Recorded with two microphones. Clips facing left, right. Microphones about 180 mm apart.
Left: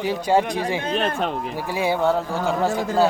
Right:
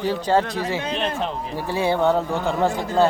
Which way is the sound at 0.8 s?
50° left (ahead or behind).